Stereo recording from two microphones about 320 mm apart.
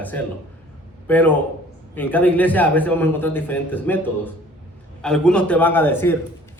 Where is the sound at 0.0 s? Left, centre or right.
Centre.